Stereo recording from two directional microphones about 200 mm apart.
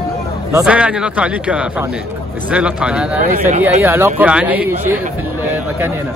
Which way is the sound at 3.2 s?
40° right (ahead or behind).